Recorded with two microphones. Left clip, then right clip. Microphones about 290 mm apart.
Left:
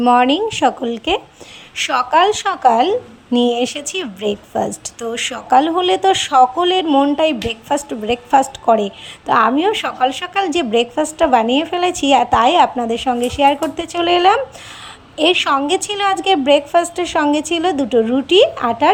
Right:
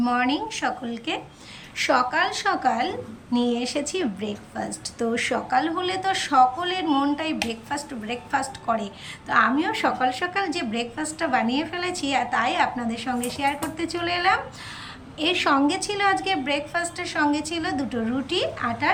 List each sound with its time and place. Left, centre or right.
0.1 s a woman's voice: centre